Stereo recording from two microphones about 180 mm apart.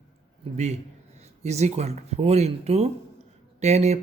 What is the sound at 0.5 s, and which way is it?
Speech, 40° right (ahead or behind).